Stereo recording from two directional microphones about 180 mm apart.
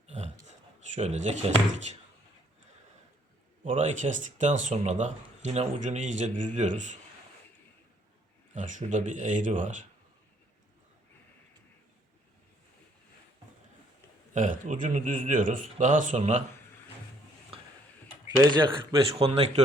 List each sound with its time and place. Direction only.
0.1 s a sound: 40° right (ahead or behind)
0.9 s speech: 40° right (ahead or behind)
3.7 s speech: 45° right (ahead or behind)
8.5 s speech: 45° right (ahead or behind)
14.3 s speech: 45° right (ahead or behind)
18.3 s speech: 25° right (ahead or behind)
19.2 s speech: 35° right (ahead or behind)